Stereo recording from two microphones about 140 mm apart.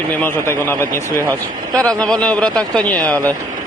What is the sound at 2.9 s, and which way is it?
Speech, 25° right (ahead or behind).